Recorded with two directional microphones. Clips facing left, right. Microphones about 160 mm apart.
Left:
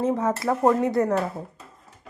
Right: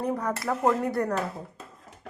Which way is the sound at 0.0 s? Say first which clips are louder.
Left 5 dB; 25° left (ahead or behind).